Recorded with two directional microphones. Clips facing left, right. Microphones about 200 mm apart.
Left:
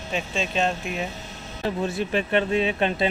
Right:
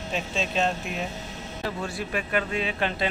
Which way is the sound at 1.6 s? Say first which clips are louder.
Left 6 dB; 20° left (ahead or behind).